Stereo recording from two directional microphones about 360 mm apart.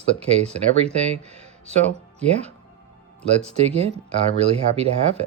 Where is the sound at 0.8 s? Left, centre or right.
Centre.